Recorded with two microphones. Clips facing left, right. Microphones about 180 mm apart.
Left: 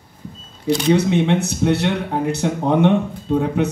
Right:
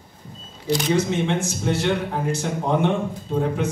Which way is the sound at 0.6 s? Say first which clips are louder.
Left 5 dB; 60° left (ahead or behind).